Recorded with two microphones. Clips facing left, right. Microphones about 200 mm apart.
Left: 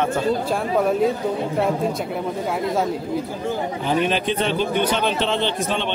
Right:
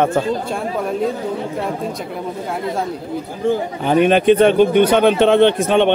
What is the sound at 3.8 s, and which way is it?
Speech, 55° right (ahead or behind).